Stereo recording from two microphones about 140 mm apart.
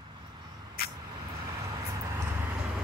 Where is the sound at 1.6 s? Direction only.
25° right (ahead or behind).